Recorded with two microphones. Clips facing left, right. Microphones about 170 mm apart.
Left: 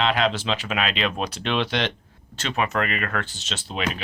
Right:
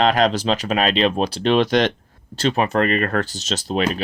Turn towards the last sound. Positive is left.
turn(degrees=-40)  # may be behind; listen again after turning